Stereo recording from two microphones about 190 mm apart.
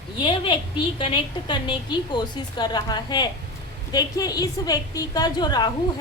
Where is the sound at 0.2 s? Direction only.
25° left (ahead or behind).